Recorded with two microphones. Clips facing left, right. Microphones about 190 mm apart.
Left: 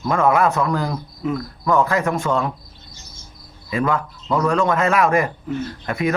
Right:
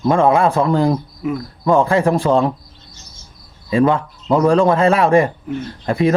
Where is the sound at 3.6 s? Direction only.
30° right (ahead or behind).